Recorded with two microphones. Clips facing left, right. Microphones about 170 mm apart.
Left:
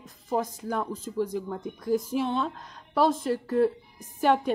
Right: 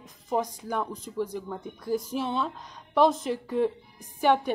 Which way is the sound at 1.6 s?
5° right (ahead or behind).